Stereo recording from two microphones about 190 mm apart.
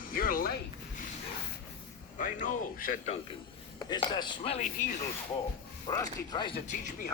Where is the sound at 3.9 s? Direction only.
25° left (ahead or behind).